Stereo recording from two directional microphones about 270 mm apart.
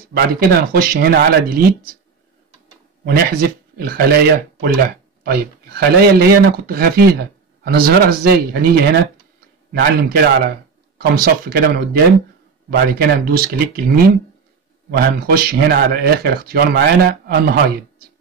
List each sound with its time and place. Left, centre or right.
0.1 s speech: right
3.1 s speech: right
9.7 s speech: right
13.0 s speech: right